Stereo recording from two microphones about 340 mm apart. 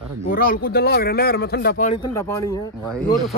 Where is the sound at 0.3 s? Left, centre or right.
Left.